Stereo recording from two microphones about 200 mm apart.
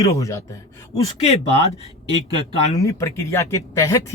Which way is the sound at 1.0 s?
30° left (ahead or behind).